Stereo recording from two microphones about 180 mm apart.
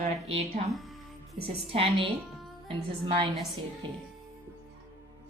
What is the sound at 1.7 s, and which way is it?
A woman's voice, 30° right (ahead or behind).